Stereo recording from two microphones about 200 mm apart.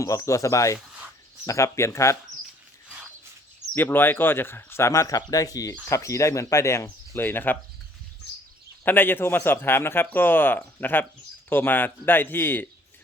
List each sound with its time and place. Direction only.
0.0 s speech: 15° left (ahead or behind)
3.8 s speech: 10° left (ahead or behind)
8.8 s speech: 10° left (ahead or behind)